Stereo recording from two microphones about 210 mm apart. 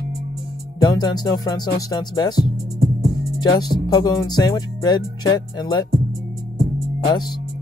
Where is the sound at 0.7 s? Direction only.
20° left (ahead or behind).